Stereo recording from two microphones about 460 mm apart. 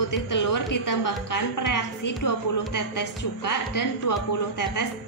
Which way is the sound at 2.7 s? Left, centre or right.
Left.